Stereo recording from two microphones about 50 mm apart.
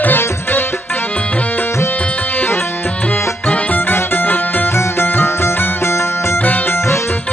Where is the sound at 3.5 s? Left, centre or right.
Left.